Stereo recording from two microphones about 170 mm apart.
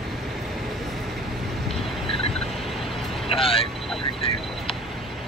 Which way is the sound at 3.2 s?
35° left (ahead or behind).